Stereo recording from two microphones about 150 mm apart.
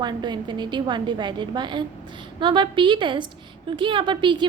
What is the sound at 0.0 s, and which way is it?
A woman's voice, 30° right (ahead or behind).